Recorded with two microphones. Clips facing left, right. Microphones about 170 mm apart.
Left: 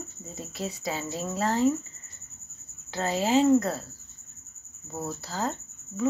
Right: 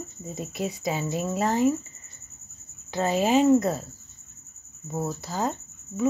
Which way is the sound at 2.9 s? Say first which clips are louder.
Right 2 dB; 15° right (ahead or behind).